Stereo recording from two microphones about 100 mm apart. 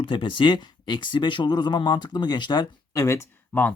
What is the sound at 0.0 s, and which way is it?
Speech, 55° left (ahead or behind).